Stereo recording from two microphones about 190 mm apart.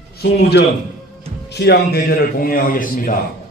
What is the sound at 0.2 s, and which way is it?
A man's voice, 55° left (ahead or behind).